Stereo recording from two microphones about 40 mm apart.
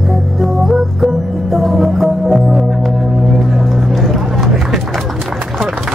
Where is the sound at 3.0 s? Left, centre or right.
Centre.